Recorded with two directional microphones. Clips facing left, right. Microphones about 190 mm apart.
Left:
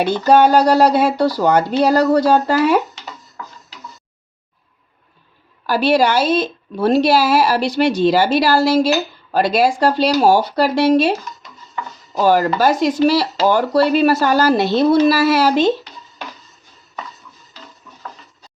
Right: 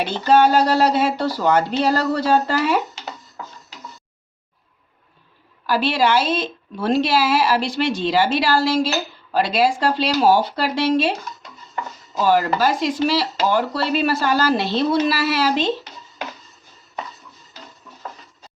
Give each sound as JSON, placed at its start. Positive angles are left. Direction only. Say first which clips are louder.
{"t": 0.0, "sound": "speech", "louder": "left 3 dB", "side_deg": 45}
{"t": 5.6, "sound": "speech", "louder": "left 4 dB", "side_deg": 40}
{"t": 12.1, "sound": "speech", "louder": "left 3 dB", "side_deg": 45}